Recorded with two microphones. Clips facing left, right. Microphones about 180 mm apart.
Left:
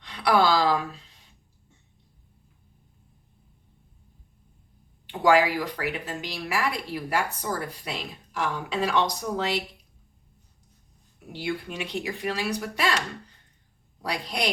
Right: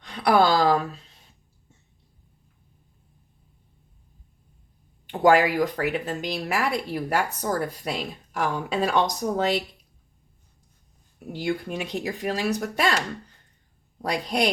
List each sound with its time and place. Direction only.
0.0 s a sound: 50° right (ahead or behind)
5.2 s speech: 50° right (ahead or behind)
11.3 s speech: 45° right (ahead or behind)
14.0 s speech: 45° right (ahead or behind)